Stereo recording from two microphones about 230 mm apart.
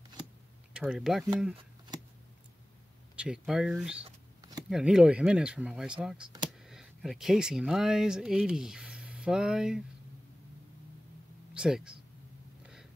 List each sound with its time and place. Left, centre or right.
0.7 s speech: centre
3.2 s speech: centre
4.0 s a sound: centre
4.6 s speech: centre
11.5 s speech: centre